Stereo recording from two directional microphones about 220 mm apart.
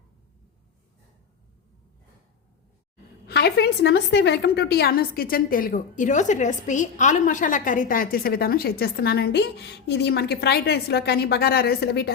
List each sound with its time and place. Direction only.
3.2 s a woman's voice: 45° left (ahead or behind)